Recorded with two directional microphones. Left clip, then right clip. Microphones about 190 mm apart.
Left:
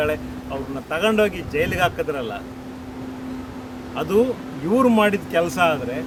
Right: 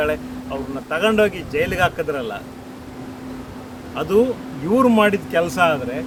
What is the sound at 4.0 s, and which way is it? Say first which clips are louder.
Speech: right 2 dB; 15° right (ahead or behind).